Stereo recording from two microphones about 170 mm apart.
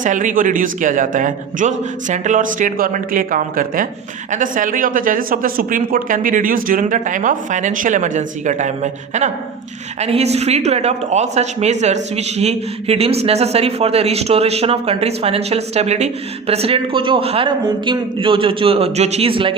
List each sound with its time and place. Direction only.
0.0 s a woman's voice: 50° right (ahead or behind); by 19.5 s 30° right (ahead or behind)